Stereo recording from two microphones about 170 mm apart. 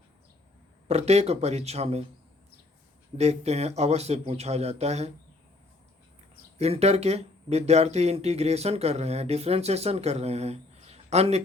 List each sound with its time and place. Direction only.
0.9 s speech: 40° right (ahead or behind)
3.2 s speech: 40° right (ahead or behind)
6.6 s speech: 40° right (ahead or behind)